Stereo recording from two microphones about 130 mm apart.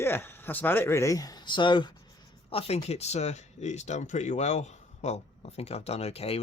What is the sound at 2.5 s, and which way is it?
Speech, 50° left (ahead or behind).